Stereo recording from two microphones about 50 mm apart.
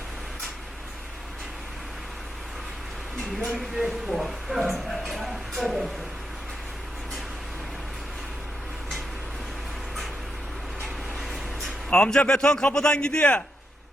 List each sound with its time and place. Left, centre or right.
3.8 s speech: centre
11.2 s vehicle: centre
11.9 s a man's voice: centre